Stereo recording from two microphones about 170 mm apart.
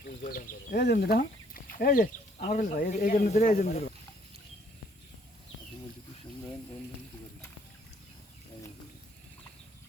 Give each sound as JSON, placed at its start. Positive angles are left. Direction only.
{"t": 0.0, "sound": "speech", "side_deg": 55}
{"t": 3.4, "sound": "speech", "side_deg": 45}